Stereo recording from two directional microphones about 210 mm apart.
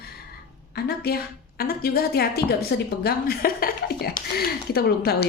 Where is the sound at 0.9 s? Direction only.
45° left (ahead or behind).